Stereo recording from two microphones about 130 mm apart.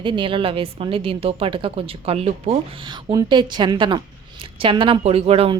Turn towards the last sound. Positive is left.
turn(degrees=-45)  # may be behind; listen again after turning